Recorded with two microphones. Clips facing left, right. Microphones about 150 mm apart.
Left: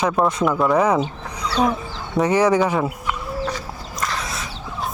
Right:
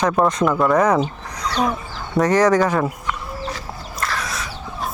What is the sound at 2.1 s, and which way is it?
Speech, 10° left (ahead or behind).